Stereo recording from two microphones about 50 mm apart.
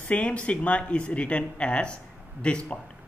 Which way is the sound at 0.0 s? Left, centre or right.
Left.